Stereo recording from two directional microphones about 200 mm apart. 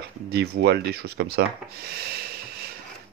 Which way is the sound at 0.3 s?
55° right (ahead or behind).